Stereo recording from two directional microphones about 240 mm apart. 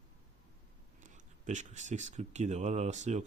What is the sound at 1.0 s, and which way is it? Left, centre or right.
Speech, right.